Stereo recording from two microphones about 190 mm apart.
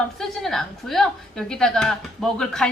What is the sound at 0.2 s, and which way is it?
A woman's voice, centre (ahead or behind).